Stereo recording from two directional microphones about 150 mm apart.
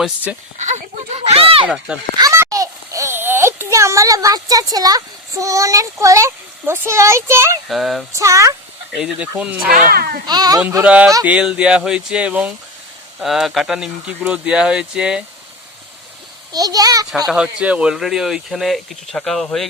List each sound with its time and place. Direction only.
0.3 s speech: 10° right (ahead or behind)
0.6 s speech: 50° right (ahead or behind)
1.6 s speech: 5° right (ahead or behind)
2.1 s a child's voice: 20° right (ahead or behind)
7.7 s speech: centre (ahead or behind)
8.1 s a child's voice: 20° right (ahead or behind)
9.0 s speech: 5° right (ahead or behind)
9.6 s speech: 85° right
10.2 s a child's voice: 25° right (ahead or behind)
10.8 s speech: 5° right (ahead or behind)
16.5 s a child's voice: 25° right (ahead or behind)
17.2 s speech: 5° right (ahead or behind)